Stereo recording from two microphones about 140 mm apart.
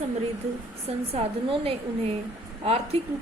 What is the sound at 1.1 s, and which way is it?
Speech, 40° right (ahead or behind).